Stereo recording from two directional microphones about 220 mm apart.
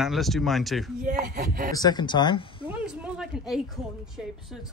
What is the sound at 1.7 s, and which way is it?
Speech, 15° left (ahead or behind).